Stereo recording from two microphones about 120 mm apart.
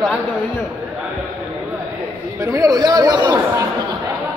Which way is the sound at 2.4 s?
30° right (ahead or behind).